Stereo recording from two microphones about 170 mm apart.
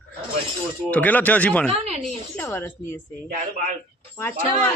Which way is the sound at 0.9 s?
10° left (ahead or behind).